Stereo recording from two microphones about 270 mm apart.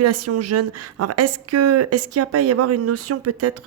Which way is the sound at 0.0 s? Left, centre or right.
Right.